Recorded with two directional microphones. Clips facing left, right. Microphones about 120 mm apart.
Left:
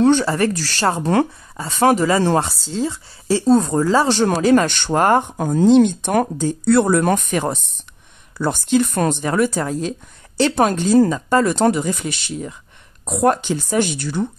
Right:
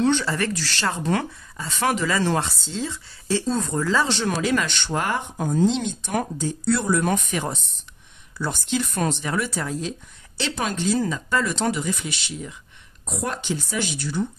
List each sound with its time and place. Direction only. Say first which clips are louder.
0.0 s speech: left 7 dB; 40° left (ahead or behind); by 14.2 s 60° left (ahead or behind)